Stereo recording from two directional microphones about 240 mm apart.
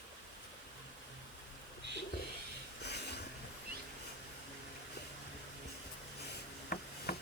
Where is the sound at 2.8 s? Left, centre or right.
Left.